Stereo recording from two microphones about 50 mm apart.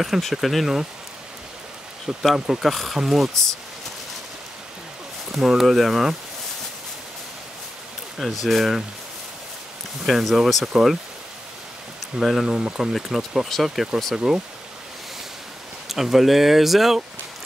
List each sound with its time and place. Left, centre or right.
0.0 s speech: centre
2.3 s speech: centre
2.6 s speech: centre
5.3 s speech: centre
8.2 s speech: centre
10.0 s speech: centre
12.2 s speech: centre
12.9 s speech: centre
15.9 s speech: centre